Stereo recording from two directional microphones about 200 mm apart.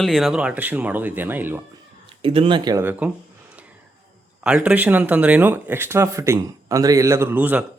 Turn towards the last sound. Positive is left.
turn(degrees=-10)  # may be behind; listen again after turning